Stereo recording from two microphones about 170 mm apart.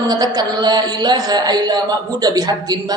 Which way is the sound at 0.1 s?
20° right (ahead or behind).